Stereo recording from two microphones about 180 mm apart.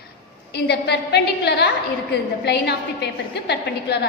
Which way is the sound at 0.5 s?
70° left (ahead or behind).